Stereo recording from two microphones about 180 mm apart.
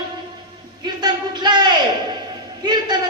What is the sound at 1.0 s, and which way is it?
A man's voice, 25° right (ahead or behind).